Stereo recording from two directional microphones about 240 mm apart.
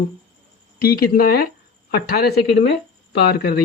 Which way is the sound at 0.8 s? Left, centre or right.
Left.